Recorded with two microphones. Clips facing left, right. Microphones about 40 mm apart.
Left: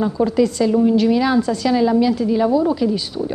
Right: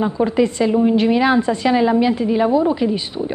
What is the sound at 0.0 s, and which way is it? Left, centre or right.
A woman's voice, right.